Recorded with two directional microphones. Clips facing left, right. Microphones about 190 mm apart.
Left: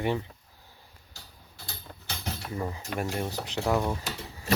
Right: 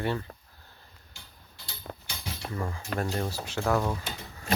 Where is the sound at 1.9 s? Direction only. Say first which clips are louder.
Right 7 dB; 75° right (ahead or behind).